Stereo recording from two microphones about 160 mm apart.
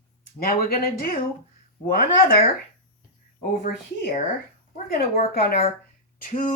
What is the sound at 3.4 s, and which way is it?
Speech, 75° left (ahead or behind).